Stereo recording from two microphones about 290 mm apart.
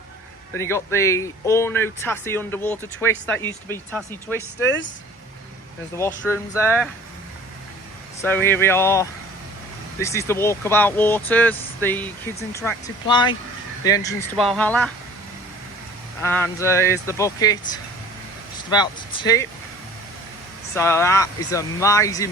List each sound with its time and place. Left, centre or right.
0.5 s speech: centre
6.0 s speech: centre
8.2 s speech: centre
14.3 s speech: centre
16.2 s speech: centre
18.7 s speech: centre
20.7 s speech: centre